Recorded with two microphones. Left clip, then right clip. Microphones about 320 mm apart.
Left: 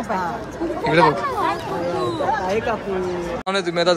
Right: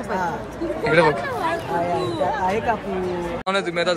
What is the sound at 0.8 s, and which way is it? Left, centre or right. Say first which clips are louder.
Speech: left 1 dB; centre.